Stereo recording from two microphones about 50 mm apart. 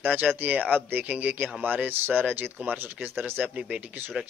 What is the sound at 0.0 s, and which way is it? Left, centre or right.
Speech, right.